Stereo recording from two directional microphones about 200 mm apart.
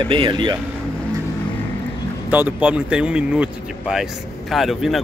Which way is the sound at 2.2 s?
10° right (ahead or behind).